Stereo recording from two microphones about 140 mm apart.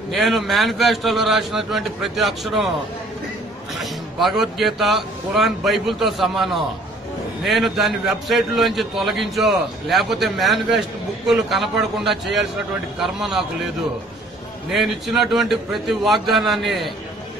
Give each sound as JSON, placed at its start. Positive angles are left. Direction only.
{"t": 0.1, "sound": "a man's voice", "side_deg": 0}
{"t": 3.7, "sound": "a man's voice", "side_deg": 0}
{"t": 14.7, "sound": "a man's voice", "side_deg": 0}